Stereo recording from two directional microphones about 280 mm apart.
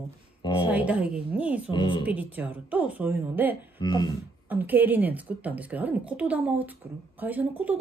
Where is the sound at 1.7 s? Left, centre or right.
Centre.